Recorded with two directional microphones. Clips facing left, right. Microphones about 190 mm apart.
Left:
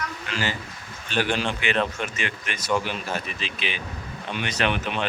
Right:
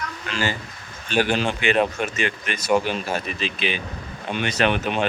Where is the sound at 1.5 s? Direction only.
45° right (ahead or behind).